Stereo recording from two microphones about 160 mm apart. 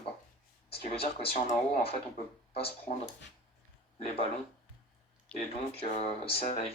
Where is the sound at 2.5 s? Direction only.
35° left (ahead or behind).